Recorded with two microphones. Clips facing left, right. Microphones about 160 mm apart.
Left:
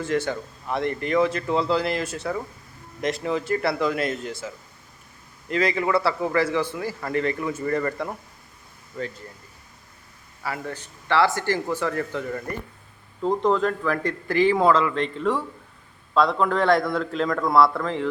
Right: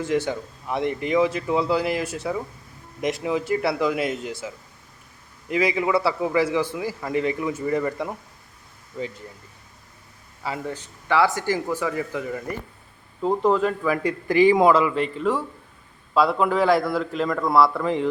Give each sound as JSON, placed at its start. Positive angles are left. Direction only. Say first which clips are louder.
{"t": 0.0, "sound": "a man's voice", "louder": "right 1 dB", "side_deg": -15}
{"t": 10.4, "sound": "a man's voice", "louder": "right 1 dB", "side_deg": -20}
{"t": 17.8, "sound": "a man's voice", "louder": "right 3 dB", "side_deg": -15}